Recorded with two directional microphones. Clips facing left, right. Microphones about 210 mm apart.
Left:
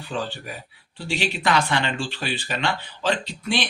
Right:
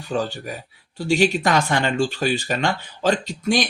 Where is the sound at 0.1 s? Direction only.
45° right (ahead or behind).